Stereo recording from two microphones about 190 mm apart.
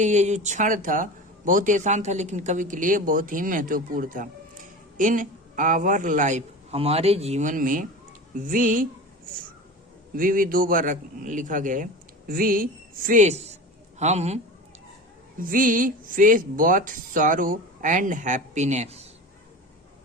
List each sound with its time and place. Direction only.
0.0 s speech: 40° right (ahead or behind)
10.2 s a man's voice: 45° right (ahead or behind)
15.4 s speech: 45° right (ahead or behind)